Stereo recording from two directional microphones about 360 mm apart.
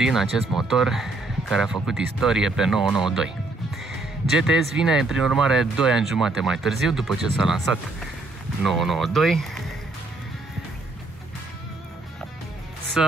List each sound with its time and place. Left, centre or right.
0.0 s speech: centre
4.3 s speech: centre
8.6 s speech: centre
13.0 s speech: centre